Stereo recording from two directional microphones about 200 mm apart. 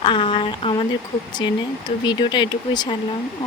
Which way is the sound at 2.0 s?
20° left (ahead or behind).